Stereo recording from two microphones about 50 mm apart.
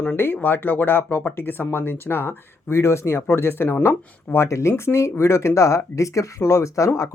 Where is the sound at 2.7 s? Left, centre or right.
Left.